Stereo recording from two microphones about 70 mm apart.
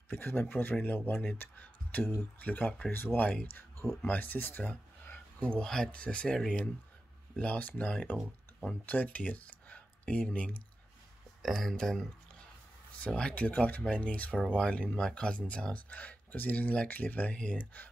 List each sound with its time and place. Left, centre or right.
0.1 s speech: left
5.6 s speech: centre
13.0 s speech: centre